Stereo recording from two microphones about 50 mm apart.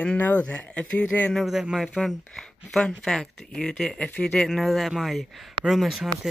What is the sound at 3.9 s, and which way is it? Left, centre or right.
Speech, left.